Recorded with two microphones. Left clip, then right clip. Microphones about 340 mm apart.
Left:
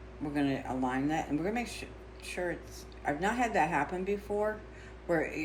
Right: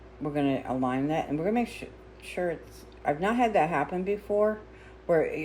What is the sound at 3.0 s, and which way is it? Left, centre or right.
Speech, right.